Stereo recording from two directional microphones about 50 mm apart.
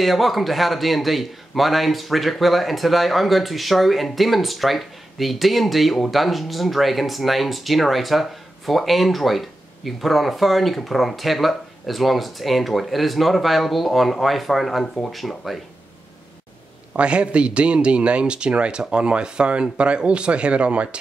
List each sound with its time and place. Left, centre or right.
0.0 s a man's voice: centre
16.9 s a man's voice: right